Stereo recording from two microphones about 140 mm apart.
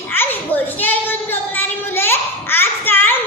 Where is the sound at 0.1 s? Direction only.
15° left (ahead or behind).